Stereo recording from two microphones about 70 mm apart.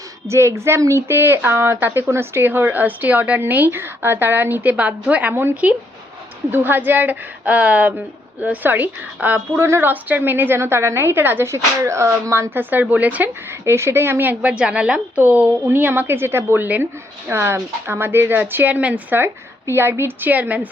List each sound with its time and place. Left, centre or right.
0.3 s a woman's voice: right; by 5.3 s centre
5.3 s a woman's voice: right
9.9 s a woman's voice: right
11.5 s speech: right
12.7 s a woman's voice: right
13.5 s a woman's voice: right
14.4 s a woman's voice: centre
19.2 s a woman's voice: right